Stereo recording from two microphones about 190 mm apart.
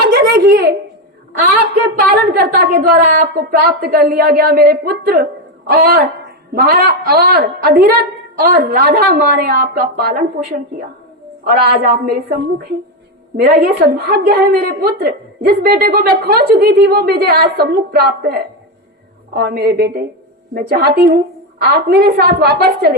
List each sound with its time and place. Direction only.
0.0 s a sound: 55° right (ahead or behind)
2.0 s a woman's voice: 55° right (ahead or behind)
11.5 s a woman's voice: 55° right (ahead or behind)
13.3 s a woman's voice: 60° right (ahead or behind)